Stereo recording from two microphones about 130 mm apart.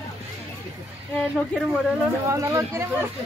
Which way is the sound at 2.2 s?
25° right (ahead or behind).